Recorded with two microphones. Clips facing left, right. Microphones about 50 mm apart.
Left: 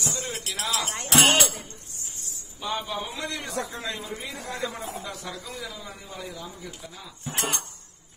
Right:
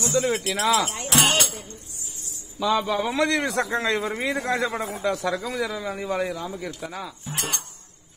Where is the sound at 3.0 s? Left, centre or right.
Right.